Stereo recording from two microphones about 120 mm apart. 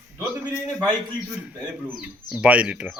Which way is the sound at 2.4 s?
10° right (ahead or behind).